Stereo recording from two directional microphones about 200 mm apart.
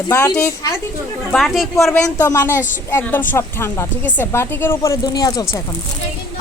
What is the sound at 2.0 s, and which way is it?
Speech, 15° left (ahead or behind).